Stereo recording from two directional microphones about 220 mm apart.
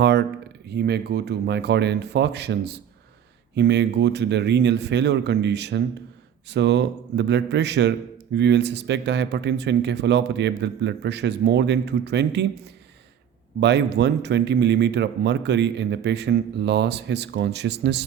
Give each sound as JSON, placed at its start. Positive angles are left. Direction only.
{"t": 0.0, "sound": "a man's voice", "side_deg": -50}
{"t": 13.6, "sound": "a man's voice", "side_deg": -50}